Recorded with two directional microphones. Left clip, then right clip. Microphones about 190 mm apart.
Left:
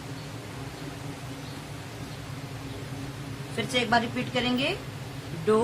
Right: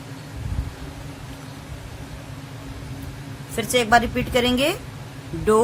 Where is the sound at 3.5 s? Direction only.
65° right (ahead or behind).